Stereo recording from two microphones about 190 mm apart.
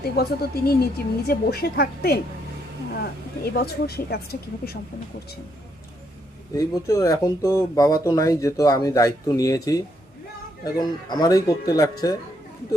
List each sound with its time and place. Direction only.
0.2 s a woman's voice: 55° left (ahead or behind)
3.5 s a woman's voice: 55° left (ahead or behind)
6.5 s speech: 15° left (ahead or behind)